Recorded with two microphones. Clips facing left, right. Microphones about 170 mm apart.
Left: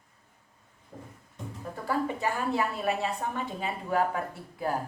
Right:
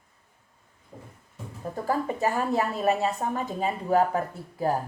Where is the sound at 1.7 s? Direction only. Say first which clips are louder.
Right 2 dB; 40° right (ahead or behind).